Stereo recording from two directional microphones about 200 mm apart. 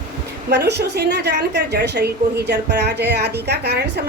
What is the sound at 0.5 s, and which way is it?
A woman's voice, 55° right (ahead or behind).